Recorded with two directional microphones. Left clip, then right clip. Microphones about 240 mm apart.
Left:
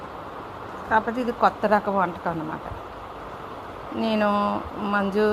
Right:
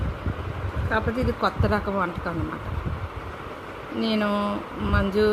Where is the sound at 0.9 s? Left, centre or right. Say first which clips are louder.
Left 3 dB; centre.